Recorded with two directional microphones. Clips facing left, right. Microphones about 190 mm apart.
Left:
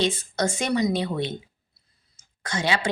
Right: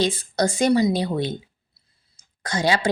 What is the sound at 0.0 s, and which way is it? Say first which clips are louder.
A woman's voice: right 3 dB; 35° right (ahead or behind).